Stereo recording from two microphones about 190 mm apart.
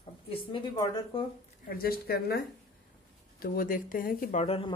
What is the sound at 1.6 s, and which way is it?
Speech, 55° left (ahead or behind).